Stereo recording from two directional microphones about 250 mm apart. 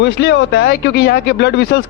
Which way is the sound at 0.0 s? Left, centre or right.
Left.